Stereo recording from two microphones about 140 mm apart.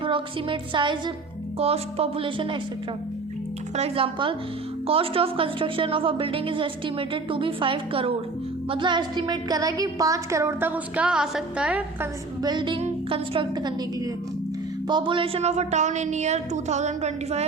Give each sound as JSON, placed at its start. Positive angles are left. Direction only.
{"t": 0.0, "sound": "a woman's voice", "side_deg": -40}
{"t": 3.8, "sound": "a woman's voice", "side_deg": -45}
{"t": 12.4, "sound": "a woman's voice", "side_deg": -30}